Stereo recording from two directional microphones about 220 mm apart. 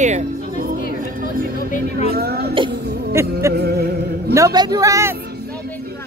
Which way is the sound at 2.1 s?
45° right (ahead or behind).